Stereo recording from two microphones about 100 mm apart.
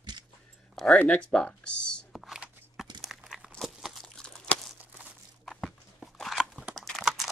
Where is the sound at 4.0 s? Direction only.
5° left (ahead or behind).